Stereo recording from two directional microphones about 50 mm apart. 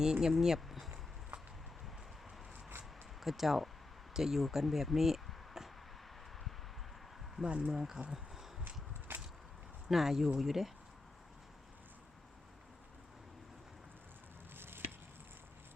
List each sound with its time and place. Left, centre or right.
0.0 s speech: centre
1.3 s a sound: right
3.2 s speech: centre
7.4 s speech: centre
9.1 s a sound: right
9.9 s speech: centre
14.5 s chop: right